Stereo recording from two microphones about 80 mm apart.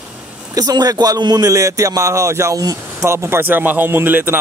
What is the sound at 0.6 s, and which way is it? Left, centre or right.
Speech, right.